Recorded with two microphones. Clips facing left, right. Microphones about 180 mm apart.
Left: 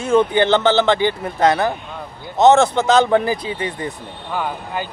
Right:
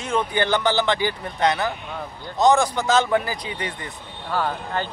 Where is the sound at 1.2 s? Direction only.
40° left (ahead or behind).